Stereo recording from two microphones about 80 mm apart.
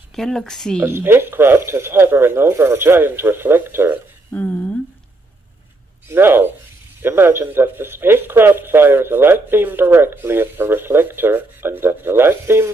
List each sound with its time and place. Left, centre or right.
0.1 s speech: centre
0.8 s speech: right
4.3 s a sound: left
6.0 s speech: right